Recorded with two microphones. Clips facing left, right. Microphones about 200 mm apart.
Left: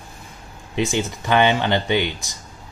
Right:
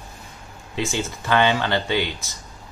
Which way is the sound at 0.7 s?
15° left (ahead or behind).